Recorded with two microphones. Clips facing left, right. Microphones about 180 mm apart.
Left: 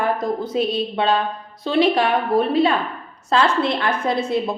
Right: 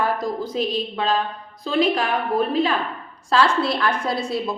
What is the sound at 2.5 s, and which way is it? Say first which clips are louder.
A woman's voice: left 3 dB; 30° left (ahead or behind).